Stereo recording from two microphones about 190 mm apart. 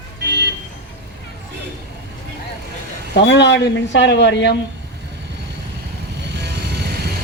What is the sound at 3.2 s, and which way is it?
Speech, 65° left (ahead or behind).